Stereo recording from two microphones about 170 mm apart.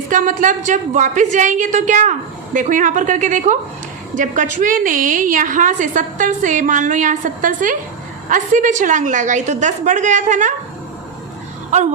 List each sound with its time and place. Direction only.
0.1 s a woman's voice: 50° right (ahead or behind)
11.7 s roaring cats: 45° right (ahead or behind)